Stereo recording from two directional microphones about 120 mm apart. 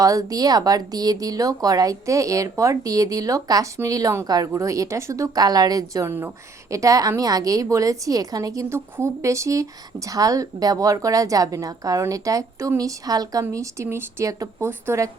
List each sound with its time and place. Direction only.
0.0 s a woman's voice: 30° right (ahead or behind)